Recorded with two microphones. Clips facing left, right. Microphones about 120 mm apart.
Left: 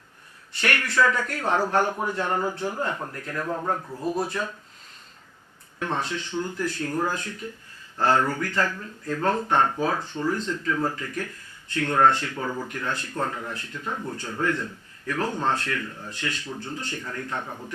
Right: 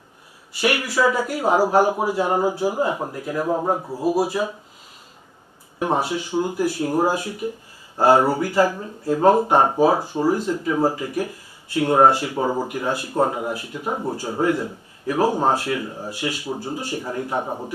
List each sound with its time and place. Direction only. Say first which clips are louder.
0.5 s speech: right 4 dB; 10° right (ahead or behind)
4.0 s speech: right 7 dB; 10° right (ahead or behind)
5.8 s speech: right 7 dB; 10° right (ahead or behind)
12.4 s speech: right 8 dB; 30° right (ahead or behind)
12.6 s speech: right 6 dB; 10° right (ahead or behind)
17.4 s speech: right 8 dB; 40° right (ahead or behind)